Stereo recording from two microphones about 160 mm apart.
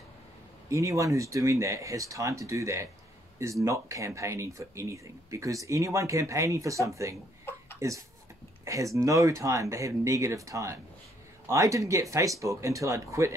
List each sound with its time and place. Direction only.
0.7 s speech: 20° right (ahead or behind)